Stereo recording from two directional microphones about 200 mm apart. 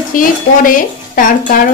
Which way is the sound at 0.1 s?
40° left (ahead or behind).